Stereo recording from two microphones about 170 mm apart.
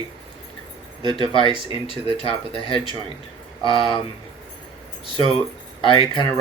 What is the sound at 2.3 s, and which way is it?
Speech, 30° left (ahead or behind).